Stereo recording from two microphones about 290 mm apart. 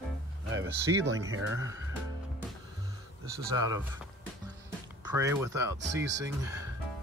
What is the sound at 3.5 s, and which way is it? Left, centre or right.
Speech, centre.